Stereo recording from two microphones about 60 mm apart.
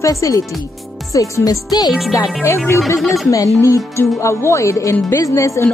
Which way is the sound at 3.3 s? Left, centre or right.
Left.